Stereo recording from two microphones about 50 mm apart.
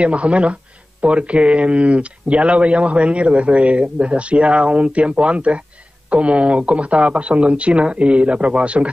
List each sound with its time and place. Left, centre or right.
0.0 s speech: right